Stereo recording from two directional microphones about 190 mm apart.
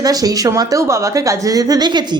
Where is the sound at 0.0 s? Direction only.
20° right (ahead or behind).